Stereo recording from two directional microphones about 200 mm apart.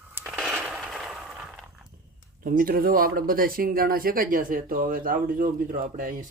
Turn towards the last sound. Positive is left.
turn(degrees=-45)  # may be behind; listen again after turning